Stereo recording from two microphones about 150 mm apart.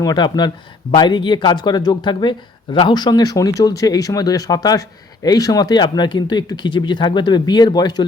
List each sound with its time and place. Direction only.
0.0 s speech: 30° left (ahead or behind)